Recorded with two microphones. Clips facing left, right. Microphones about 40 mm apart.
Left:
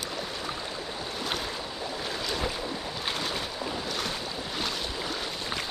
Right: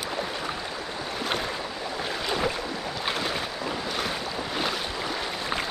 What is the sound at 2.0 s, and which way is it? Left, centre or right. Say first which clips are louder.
Boat: right 5 dB; centre.